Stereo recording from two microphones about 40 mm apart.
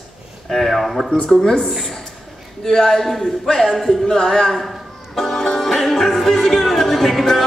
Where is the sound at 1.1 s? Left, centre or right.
Left.